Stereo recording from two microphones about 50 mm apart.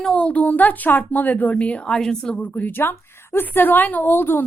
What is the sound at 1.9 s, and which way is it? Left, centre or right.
Speech, centre.